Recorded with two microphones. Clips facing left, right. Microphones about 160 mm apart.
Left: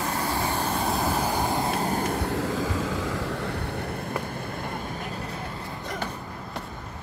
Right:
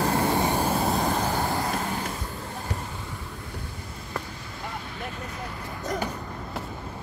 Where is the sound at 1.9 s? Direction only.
50° left (ahead or behind); by 2.9 s 90° left.